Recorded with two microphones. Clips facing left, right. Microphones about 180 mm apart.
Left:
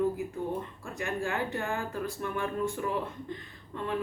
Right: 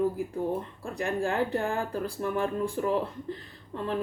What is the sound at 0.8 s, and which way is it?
Speech, 35° right (ahead or behind).